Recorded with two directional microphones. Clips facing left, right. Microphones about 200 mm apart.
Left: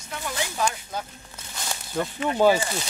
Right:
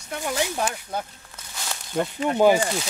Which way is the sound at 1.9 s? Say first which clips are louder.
Right 2 dB; 10° right (ahead or behind).